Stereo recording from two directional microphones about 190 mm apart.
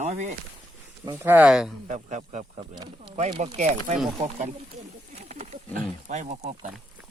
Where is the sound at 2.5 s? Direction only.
25° right (ahead or behind).